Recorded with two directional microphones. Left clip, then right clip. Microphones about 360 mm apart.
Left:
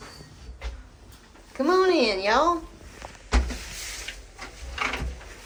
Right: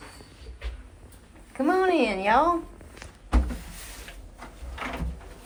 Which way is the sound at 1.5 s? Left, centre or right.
Centre.